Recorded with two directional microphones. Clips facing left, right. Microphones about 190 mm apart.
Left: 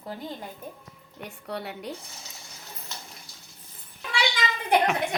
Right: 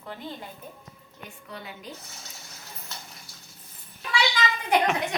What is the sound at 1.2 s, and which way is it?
Speech, 70° left (ahead or behind).